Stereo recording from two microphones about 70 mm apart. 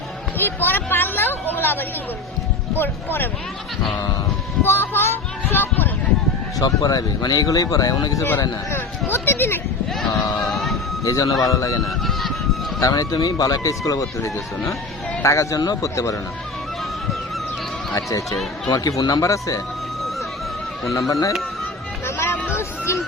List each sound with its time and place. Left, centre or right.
0.3 s speech: left
4.6 s speech: left
6.6 s speech: left
9.1 s speech: left
10.4 s a sound: centre
11.0 s speech: left
17.9 s speech: left
18.7 s speech: left
19.3 s speech: left
21.1 s speech: left
22.0 s music: left